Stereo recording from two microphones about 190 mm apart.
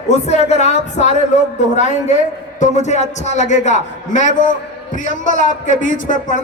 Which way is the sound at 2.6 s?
40° left (ahead or behind).